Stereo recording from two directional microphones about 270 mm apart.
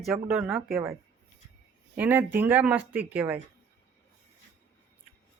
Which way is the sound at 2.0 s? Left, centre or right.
Centre.